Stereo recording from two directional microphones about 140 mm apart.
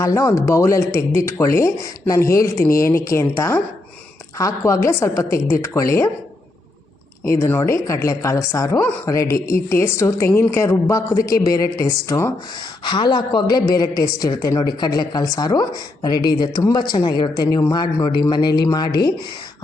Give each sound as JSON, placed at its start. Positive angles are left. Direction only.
{"t": 0.0, "sound": "a woman's voice", "side_deg": 25}
{"t": 7.3, "sound": "a woman's voice", "side_deg": 15}
{"t": 12.8, "sound": "a woman's voice", "side_deg": 30}